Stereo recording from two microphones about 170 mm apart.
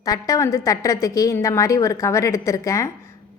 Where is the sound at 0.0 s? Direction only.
20° left (ahead or behind).